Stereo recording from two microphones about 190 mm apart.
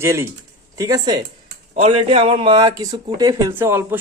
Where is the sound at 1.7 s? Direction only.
30° right (ahead or behind).